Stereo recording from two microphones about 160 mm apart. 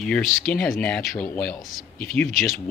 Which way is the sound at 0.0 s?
5° left (ahead or behind).